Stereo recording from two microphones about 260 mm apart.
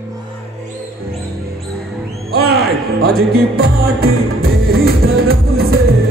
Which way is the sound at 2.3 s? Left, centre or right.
Right.